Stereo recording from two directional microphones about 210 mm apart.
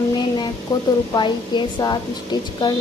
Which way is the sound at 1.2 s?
20° left (ahead or behind).